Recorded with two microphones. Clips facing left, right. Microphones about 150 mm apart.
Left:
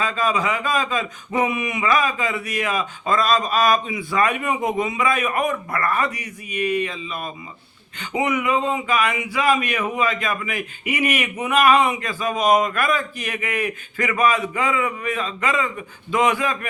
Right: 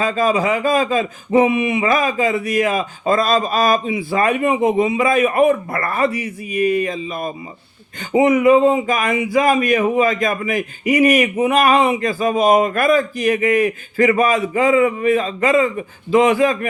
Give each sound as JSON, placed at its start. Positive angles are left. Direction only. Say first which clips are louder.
{"t": 0.0, "sound": "speech", "louder": "right 5 dB", "side_deg": -40}